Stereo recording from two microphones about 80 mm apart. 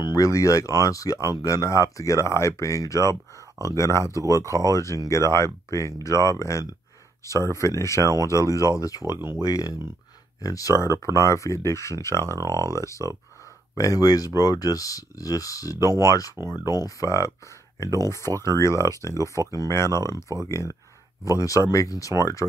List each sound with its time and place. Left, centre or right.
0.0 s speech: left
4.2 s speech: right
4.5 s speech: left
9.1 s speech: right
9.4 s speech: left
12.4 s speech: right
13.7 s speech: left
18.4 s speech: left